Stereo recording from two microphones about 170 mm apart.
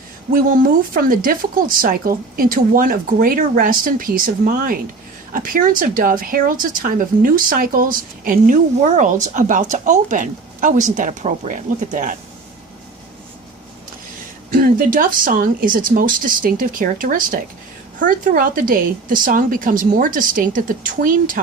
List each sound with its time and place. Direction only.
0.3 s speech: 55° right (ahead or behind)
14.5 s speech: 55° right (ahead or behind)